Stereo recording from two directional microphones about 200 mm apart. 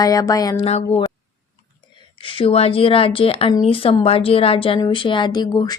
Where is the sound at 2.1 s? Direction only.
25° left (ahead or behind).